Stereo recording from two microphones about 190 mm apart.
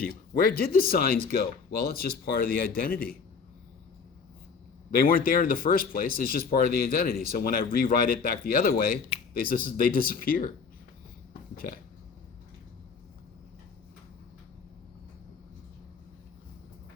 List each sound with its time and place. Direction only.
0.0 s speech: 50° left (ahead or behind)
4.9 s speech: 50° left (ahead or behind)